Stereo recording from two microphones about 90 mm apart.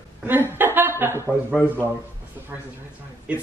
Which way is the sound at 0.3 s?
25° right (ahead or behind).